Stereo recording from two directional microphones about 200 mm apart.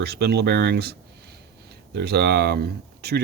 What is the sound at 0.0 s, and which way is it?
Speech, 55° right (ahead or behind).